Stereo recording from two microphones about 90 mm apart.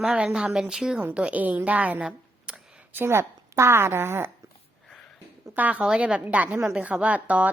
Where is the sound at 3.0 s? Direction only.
30° right (ahead or behind).